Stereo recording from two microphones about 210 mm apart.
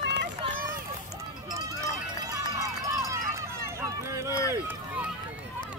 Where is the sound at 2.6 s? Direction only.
15° right (ahead or behind).